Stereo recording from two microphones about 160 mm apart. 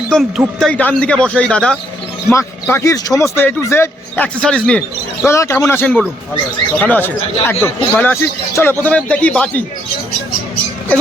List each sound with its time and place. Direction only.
0.1 s speech: centre (ahead or behind)
2.6 s speech: 15° left (ahead or behind)
5.2 s speech: 15° left (ahead or behind)